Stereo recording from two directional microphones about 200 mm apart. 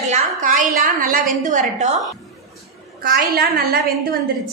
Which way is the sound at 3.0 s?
50° right (ahead or behind).